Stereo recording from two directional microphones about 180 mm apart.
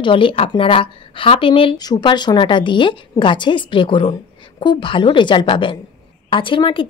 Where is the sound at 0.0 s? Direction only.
30° left (ahead or behind).